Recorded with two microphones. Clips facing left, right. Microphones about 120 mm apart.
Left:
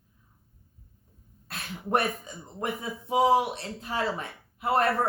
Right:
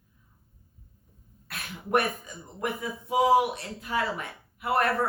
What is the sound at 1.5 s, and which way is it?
Speech, 30° left (ahead or behind).